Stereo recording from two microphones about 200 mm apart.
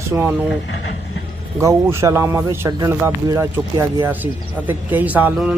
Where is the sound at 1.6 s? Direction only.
15° right (ahead or behind).